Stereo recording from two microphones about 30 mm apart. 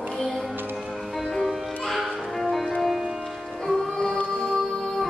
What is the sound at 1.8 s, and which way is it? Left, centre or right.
Music, centre.